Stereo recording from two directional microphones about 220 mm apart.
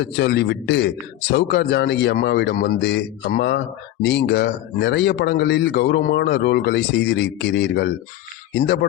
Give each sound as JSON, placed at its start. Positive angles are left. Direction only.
{"t": 0.0, "sound": "speech", "side_deg": 50}